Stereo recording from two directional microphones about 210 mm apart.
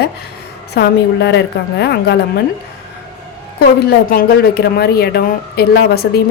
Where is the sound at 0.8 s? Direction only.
55° left (ahead or behind).